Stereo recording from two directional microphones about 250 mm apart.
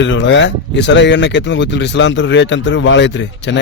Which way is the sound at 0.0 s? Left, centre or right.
Left.